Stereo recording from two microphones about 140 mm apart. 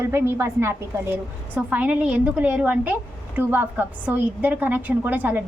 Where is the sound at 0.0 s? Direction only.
15° right (ahead or behind).